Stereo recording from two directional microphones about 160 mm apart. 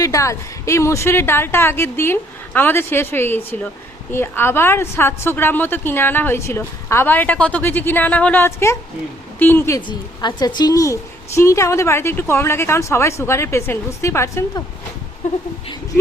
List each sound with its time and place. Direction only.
0.0 s a woman's voice: 20° left (ahead or behind)